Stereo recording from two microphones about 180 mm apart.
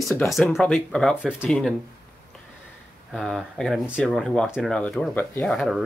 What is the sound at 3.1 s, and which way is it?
Speech, centre (ahead or behind).